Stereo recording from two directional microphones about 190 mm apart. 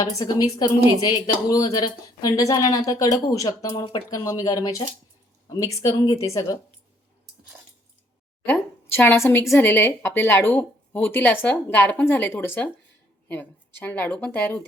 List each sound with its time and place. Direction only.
0.0 s a woman's voice: 20° left (ahead or behind)
8.4 s a woman's voice: 10° left (ahead or behind)